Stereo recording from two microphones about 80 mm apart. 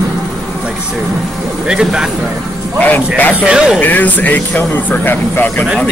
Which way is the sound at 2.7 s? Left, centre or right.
Left.